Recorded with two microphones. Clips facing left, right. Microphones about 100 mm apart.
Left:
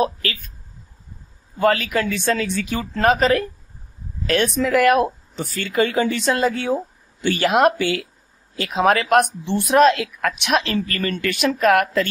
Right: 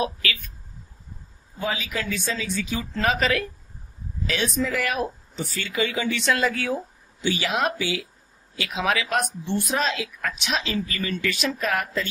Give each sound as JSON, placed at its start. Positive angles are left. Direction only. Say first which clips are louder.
{"t": 0.0, "sound": "speech", "louder": "left 5 dB", "side_deg": 40}
{"t": 1.6, "sound": "speech", "louder": "left 10 dB", "side_deg": 70}
{"t": 4.3, "sound": "speech", "louder": "left 7 dB", "side_deg": 60}
{"t": 7.2, "sound": "speech", "louder": "left 7 dB", "side_deg": 55}
{"t": 8.5, "sound": "speech", "louder": "left 7 dB", "side_deg": 45}